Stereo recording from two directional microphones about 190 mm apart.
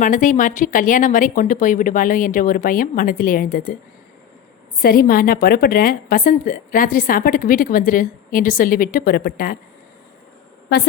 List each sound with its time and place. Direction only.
0.0 s a woman's voice: 45° left (ahead or behind)
4.8 s a woman's voice: 50° left (ahead or behind)